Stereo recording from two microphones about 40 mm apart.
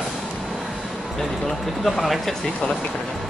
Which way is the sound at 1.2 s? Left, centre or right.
Centre.